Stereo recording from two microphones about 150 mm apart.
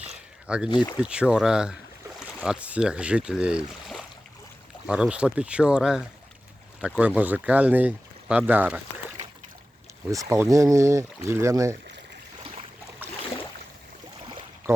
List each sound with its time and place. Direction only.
0.4 s speech: 5° right (ahead or behind)
10.1 s speech: 20° right (ahead or behind)
12.4 s boat: 35° right (ahead or behind)